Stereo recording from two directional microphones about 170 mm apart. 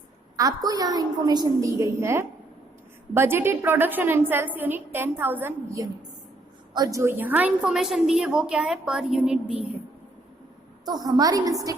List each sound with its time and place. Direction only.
0.3 s a woman's voice: 20° right (ahead or behind); by 9.6 s 5° right (ahead or behind)
10.8 s a woman's voice: 25° right (ahead or behind)